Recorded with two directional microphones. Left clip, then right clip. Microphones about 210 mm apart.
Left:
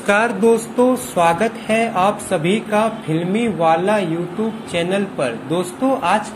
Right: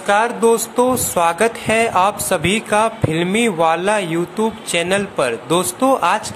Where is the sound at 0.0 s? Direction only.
10° right (ahead or behind).